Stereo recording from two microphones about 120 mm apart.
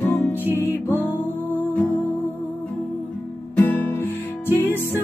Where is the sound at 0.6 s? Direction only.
20° left (ahead or behind).